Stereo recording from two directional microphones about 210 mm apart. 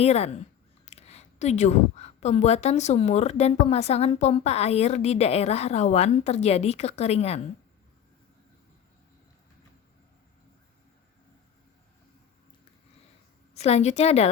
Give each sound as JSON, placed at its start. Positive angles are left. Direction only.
{"t": 0.0, "sound": "a woman's voice", "side_deg": 30}
{"t": 13.5, "sound": "a woman's voice", "side_deg": 30}